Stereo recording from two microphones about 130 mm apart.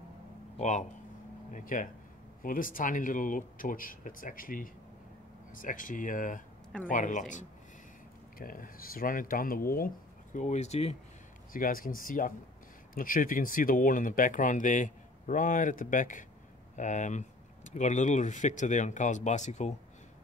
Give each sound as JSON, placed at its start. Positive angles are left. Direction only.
{"t": 0.6, "sound": "speech", "side_deg": 65}
{"t": 1.5, "sound": "speech", "side_deg": 90}
{"t": 6.9, "sound": "speech", "side_deg": 80}
{"t": 8.4, "sound": "speech", "side_deg": 90}
{"t": 11.5, "sound": "speech", "side_deg": 90}
{"t": 16.7, "sound": "speech", "side_deg": 70}